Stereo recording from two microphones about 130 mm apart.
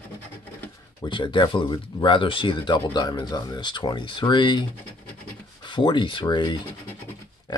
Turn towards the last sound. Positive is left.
turn(degrees=35)  # may be behind; listen again after turning